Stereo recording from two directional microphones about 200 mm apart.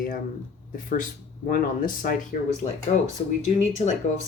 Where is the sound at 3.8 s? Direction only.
35° left (ahead or behind).